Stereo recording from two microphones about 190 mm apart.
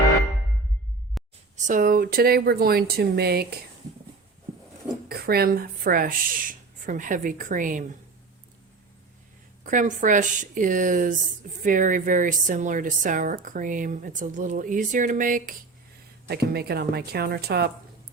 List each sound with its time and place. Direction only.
1.2 s music: centre (ahead or behind)
1.5 s a woman's voice: 40° right (ahead or behind)
5.0 s a woman's voice: 55° right (ahead or behind)
9.6 s a woman's voice: 45° right (ahead or behind)
16.2 s a woman's voice: 55° right (ahead or behind)